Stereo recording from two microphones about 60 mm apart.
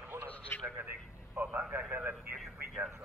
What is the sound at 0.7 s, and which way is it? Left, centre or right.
Speech, right.